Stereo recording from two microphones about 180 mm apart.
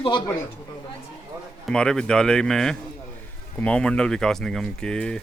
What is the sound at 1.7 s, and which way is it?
Speech, 5° left (ahead or behind).